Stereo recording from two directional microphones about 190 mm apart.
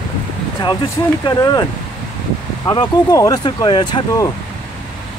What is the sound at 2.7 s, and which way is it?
Speech, 20° left (ahead or behind).